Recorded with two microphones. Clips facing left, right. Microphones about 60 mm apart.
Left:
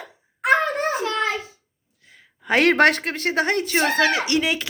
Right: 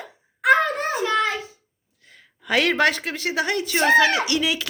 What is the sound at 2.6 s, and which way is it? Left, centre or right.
Speech, left.